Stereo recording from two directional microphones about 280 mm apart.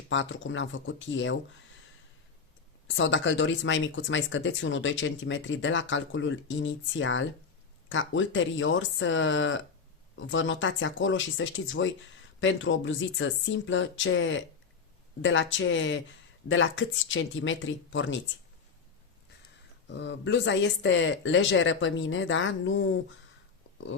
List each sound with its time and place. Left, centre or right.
0.1 s speech: left
2.8 s speech: left
19.9 s speech: left